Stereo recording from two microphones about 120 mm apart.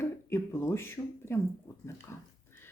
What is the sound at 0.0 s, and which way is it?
Speech, 20° left (ahead or behind).